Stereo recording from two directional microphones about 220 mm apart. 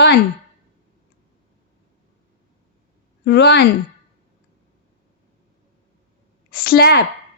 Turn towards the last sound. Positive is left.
turn(degrees=45)  # may be behind; listen again after turning